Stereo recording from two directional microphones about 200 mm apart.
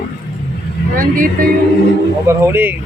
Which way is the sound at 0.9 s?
45° right (ahead or behind).